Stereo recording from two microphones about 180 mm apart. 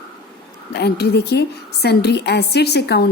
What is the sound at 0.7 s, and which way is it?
A woman's voice, 65° left (ahead or behind).